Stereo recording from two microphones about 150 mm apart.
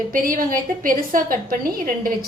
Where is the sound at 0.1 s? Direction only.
70° right (ahead or behind).